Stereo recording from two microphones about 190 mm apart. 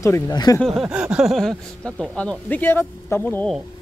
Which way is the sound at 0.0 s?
20° left (ahead or behind).